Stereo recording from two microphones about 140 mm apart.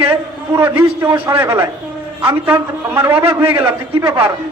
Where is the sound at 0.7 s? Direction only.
15° right (ahead or behind).